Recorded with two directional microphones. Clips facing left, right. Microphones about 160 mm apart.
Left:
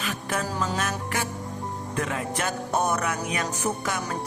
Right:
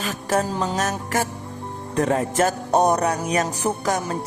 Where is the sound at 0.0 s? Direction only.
40° right (ahead or behind).